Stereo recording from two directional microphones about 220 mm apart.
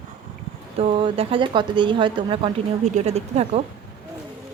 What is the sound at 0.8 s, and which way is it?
A woman's voice, 25° right (ahead or behind).